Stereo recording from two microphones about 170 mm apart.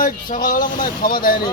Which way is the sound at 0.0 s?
55° left (ahead or behind).